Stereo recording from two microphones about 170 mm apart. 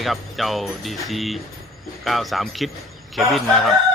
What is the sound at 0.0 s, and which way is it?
Speech, centre (ahead or behind).